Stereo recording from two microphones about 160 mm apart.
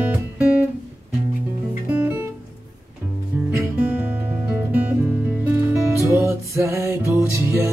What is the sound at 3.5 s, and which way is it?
Music, 15° right (ahead or behind).